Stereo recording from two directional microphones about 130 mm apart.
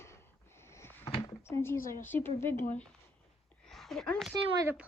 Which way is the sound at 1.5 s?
20° left (ahead or behind).